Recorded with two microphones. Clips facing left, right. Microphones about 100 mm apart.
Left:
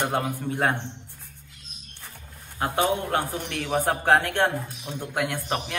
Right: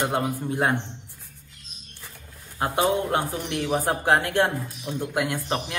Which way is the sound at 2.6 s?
15° right (ahead or behind).